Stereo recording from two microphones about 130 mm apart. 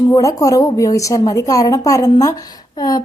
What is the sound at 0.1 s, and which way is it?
A woman's voice, 25° left (ahead or behind).